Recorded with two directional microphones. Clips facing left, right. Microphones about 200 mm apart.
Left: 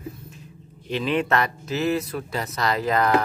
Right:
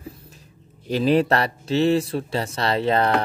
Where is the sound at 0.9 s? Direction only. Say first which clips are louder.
Right 5 dB; 40° right (ahead or behind).